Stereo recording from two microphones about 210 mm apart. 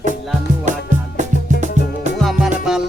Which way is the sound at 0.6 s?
35° right (ahead or behind).